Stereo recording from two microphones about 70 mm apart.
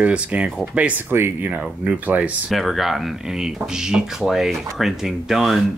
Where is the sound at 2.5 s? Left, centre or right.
Centre.